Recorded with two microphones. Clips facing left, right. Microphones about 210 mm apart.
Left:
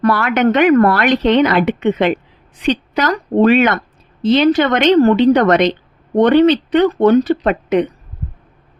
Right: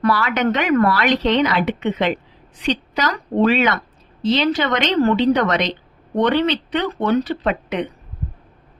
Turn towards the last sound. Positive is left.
turn(degrees=45)  # may be behind; listen again after turning